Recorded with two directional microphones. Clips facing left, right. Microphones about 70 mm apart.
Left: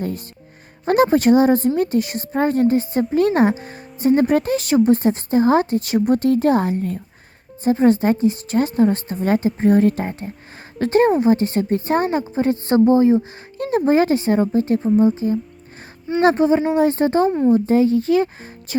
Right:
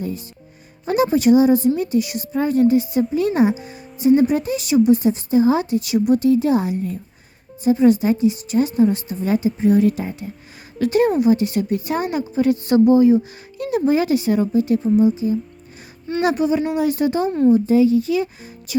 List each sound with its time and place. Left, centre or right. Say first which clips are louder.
0.0 s a woman's voice: left 1 dB; left